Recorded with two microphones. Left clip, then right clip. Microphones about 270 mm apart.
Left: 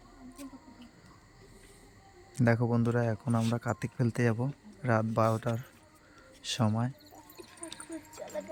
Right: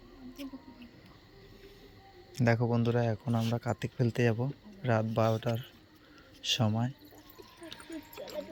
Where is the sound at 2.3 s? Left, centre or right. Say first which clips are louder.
Left 1 dB; centre.